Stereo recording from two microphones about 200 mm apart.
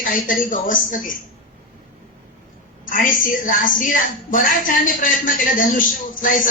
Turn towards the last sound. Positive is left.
turn(degrees=40)  # may be behind; listen again after turning